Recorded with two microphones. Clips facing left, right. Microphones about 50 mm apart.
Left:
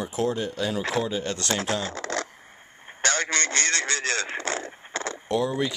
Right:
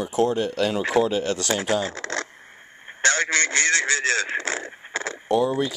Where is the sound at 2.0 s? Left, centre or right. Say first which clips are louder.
Right 1 dB; right.